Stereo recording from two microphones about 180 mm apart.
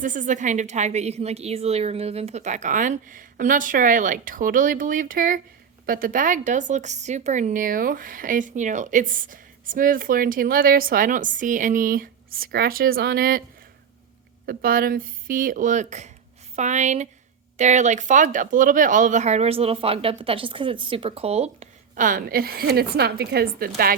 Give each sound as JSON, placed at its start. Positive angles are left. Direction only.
{"t": 0.0, "sound": "speech", "side_deg": -45}
{"t": 14.4, "sound": "speech", "side_deg": -50}